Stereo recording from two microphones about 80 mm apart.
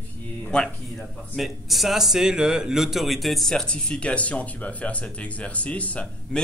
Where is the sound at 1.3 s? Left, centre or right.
Centre.